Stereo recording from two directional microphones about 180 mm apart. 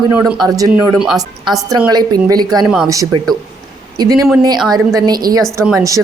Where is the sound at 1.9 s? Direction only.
20° right (ahead or behind).